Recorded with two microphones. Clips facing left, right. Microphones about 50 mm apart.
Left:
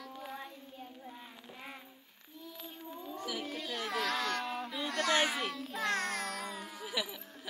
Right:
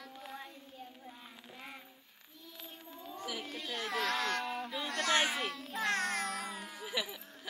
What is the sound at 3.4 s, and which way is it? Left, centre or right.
Baby cry, centre.